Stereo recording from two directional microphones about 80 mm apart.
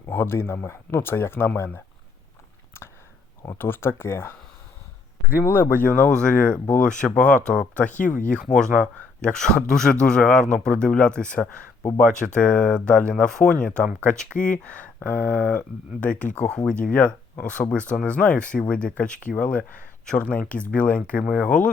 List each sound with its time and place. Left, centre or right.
0.0 s speech: left
3.6 s speech: left; by 21.7 s centre